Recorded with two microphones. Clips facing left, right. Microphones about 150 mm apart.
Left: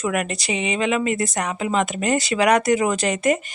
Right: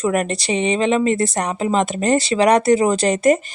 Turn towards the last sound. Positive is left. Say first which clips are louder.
# right 5 dB
turn(degrees=-35)  # may be behind; listen again after turning